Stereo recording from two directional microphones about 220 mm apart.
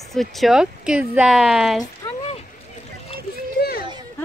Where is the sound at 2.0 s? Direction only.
25° left (ahead or behind).